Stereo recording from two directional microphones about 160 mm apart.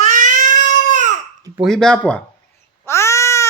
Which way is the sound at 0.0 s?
50° right (ahead or behind).